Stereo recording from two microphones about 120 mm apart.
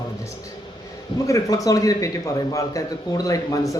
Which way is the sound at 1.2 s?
25° left (ahead or behind).